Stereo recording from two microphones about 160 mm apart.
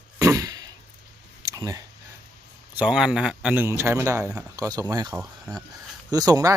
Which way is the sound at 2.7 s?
5° right (ahead or behind).